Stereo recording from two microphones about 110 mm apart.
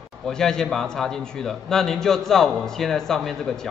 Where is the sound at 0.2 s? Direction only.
5° left (ahead or behind).